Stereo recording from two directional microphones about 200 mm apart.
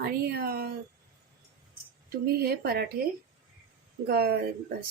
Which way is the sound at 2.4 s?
50° right (ahead or behind).